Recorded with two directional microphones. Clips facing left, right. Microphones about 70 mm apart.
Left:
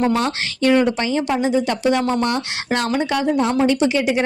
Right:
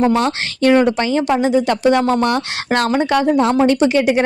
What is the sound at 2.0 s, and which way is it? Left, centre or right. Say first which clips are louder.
Speech: right 4 dB; right.